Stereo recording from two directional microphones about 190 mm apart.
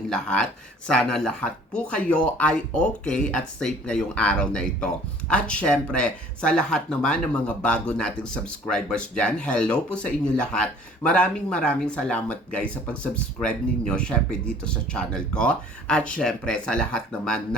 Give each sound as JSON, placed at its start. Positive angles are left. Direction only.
{"t": 0.1, "sound": "speech", "side_deg": 5}